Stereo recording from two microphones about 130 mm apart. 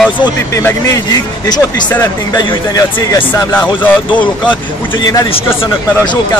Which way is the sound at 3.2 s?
15° left (ahead or behind).